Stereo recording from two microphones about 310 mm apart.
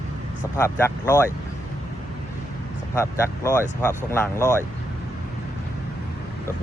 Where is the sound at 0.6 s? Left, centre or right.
Centre.